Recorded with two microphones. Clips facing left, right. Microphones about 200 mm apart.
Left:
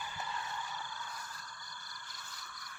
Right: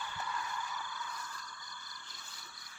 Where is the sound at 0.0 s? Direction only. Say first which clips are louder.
Right 1 dB; 20° left (ahead or behind); by 1.9 s 40° left (ahead or behind).